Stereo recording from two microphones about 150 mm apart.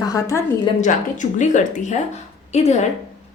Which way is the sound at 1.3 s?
55° left (ahead or behind).